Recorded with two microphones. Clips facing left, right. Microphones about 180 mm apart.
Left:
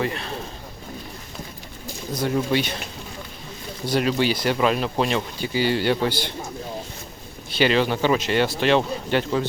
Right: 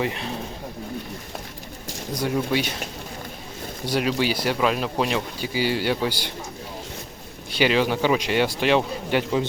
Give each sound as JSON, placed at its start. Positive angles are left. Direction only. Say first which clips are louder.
{"t": 0.0, "sound": "speech", "louder": "even", "side_deg": -15}
{"t": 2.1, "sound": "speech", "louder": "left 1 dB", "side_deg": -5}
{"t": 3.8, "sound": "speech", "louder": "left 2 dB", "side_deg": -10}
{"t": 7.5, "sound": "speech", "louder": "left 1 dB", "side_deg": -10}